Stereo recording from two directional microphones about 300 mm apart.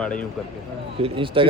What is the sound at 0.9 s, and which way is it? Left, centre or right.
Speech, centre.